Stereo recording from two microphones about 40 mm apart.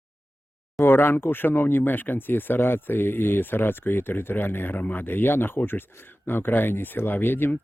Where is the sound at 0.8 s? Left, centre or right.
Left.